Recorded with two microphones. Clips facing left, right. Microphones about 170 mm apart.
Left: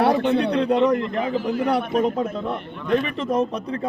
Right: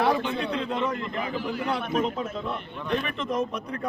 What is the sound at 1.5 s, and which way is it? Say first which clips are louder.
Speech: left 7 dB; 45° left (ahead or behind).